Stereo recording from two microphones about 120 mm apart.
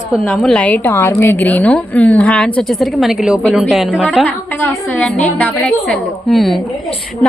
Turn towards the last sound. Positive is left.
turn(degrees=0)  # may be behind; listen again after turning